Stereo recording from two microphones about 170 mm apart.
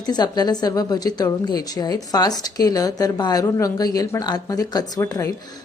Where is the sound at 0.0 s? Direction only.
25° left (ahead or behind).